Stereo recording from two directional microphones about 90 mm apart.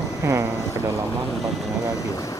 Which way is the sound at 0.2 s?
30° right (ahead or behind).